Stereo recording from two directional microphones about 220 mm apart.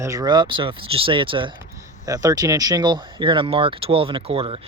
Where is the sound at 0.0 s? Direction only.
15° right (ahead or behind).